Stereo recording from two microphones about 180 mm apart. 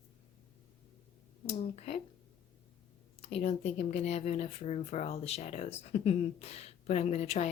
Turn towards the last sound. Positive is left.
turn(degrees=40)  # may be behind; listen again after turning